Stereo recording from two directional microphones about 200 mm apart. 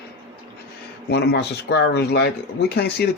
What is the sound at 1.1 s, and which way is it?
Speech, 55° left (ahead or behind).